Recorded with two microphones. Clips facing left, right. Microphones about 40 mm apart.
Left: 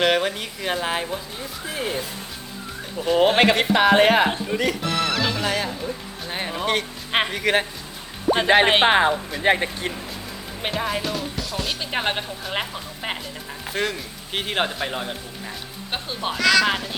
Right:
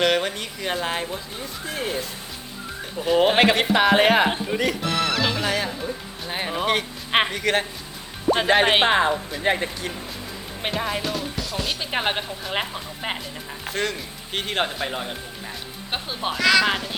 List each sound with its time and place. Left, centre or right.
0.0 s speech: centre
7.3 s speech: centre
8.9 s speech: left
10.6 s speech: centre